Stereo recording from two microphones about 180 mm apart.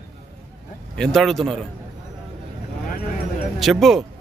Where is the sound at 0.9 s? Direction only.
Centre (ahead or behind).